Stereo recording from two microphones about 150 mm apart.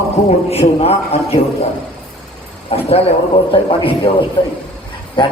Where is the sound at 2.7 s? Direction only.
40° left (ahead or behind).